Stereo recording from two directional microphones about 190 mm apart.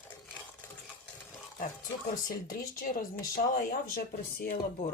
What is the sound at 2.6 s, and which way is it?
Speech, 45° left (ahead or behind).